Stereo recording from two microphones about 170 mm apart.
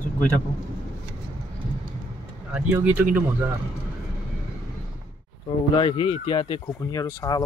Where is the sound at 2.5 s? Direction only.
10° right (ahead or behind).